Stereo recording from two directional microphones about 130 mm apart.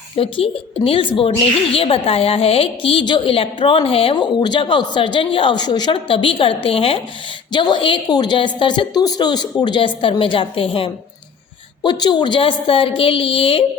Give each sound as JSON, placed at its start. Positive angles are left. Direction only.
{"t": 0.2, "sound": "a woman's voice", "side_deg": 45}